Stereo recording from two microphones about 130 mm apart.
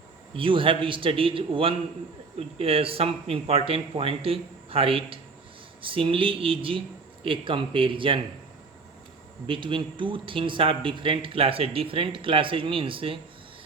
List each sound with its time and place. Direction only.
0.3 s a man's voice: 40° right (ahead or behind)
9.5 s a man's voice: 40° right (ahead or behind)